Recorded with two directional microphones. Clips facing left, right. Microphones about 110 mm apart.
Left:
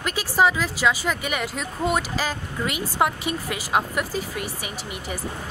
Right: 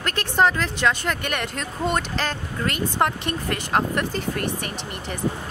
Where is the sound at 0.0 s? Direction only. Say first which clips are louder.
Even; 5° left (ahead or behind).